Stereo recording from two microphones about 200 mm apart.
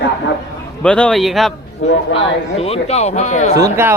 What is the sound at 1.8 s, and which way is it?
Speech, 35° left (ahead or behind).